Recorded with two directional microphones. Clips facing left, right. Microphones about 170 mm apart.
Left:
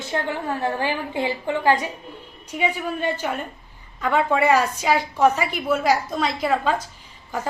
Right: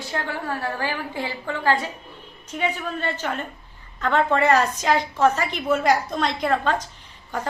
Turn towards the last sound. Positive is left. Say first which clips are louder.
# left 1 dB
turn(degrees=5)  # may be behind; listen again after turning